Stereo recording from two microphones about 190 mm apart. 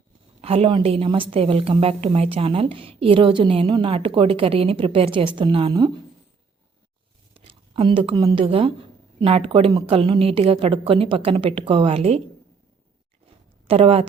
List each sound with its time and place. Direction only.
0.4 s a woman's voice: 30° right (ahead or behind)
7.3 s a sound: 30° right (ahead or behind)
8.4 s a woman's voice: 30° right (ahead or behind)
13.7 s speech: 30° right (ahead or behind)